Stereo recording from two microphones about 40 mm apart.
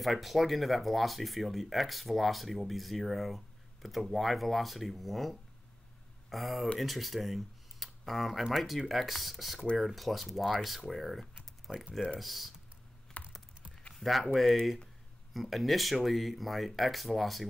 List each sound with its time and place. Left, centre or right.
0.0 s speech: centre
13.2 s computer keyboard: left
14.0 s speech: centre